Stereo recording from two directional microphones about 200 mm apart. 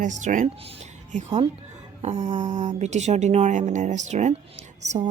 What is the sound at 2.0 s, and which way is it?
Speech, 35° right (ahead or behind).